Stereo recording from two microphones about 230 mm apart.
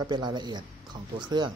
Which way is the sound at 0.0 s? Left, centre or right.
Centre.